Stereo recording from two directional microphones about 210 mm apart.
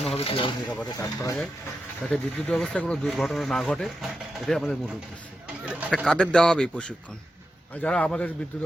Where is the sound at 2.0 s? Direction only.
5° left (ahead or behind).